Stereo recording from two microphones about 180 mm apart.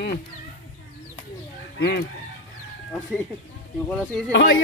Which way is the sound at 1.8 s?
70° left (ahead or behind).